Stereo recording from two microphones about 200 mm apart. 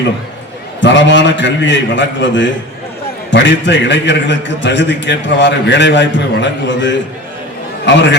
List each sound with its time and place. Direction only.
0.8 s a man's voice: 65° left (ahead or behind)